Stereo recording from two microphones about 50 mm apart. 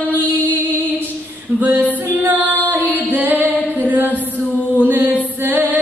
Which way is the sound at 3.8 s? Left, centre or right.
Right.